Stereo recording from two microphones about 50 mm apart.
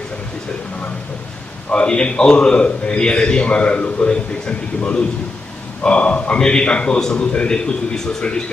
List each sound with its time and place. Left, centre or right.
1.7 s a man's voice: centre